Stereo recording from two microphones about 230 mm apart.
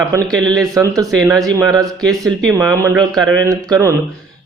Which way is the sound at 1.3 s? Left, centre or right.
Centre.